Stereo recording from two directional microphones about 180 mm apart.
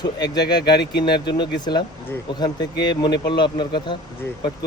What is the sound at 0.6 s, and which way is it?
Speech, 70° left (ahead or behind).